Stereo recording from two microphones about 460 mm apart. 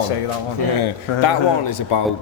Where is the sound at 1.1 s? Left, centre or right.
Left.